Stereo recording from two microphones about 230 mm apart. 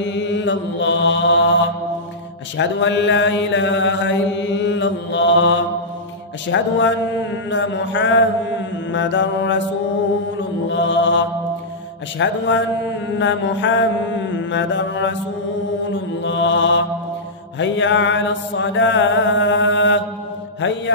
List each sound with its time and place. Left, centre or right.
0.0 s mantra: left
2.5 s mantra: left
10.7 s mantra: left